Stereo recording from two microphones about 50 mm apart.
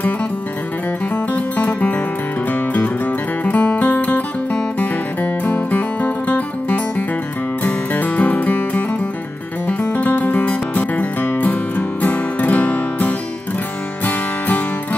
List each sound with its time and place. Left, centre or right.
1.1 s music: left